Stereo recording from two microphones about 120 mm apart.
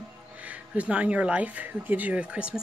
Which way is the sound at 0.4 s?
10° right (ahead or behind).